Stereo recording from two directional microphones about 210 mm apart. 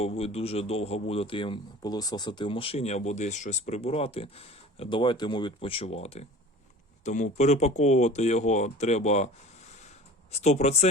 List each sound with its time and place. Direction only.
0.0 s speech: 30° left (ahead or behind)
10.3 s speech: 30° left (ahead or behind)